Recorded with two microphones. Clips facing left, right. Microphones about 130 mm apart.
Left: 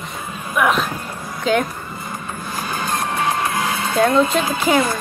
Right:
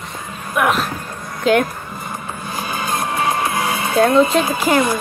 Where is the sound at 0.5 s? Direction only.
Centre (ahead or behind).